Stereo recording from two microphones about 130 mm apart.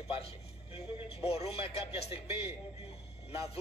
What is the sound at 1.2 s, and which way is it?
Speech, 50° left (ahead or behind).